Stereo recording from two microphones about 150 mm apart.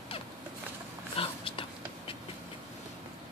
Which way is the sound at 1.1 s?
35° left (ahead or behind).